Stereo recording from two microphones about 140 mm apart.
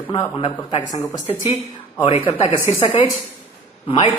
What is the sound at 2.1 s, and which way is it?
A man's voice, 45° left (ahead or behind).